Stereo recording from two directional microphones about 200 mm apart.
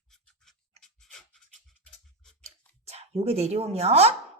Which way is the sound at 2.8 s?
30° right (ahead or behind).